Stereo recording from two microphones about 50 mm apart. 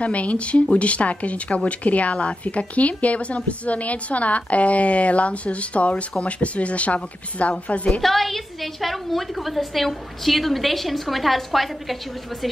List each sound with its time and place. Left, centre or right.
0.0 s speech: left
8.0 s a woman's voice: centre